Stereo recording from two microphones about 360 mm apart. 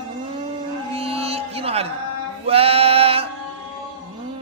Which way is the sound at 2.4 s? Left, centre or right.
Centre.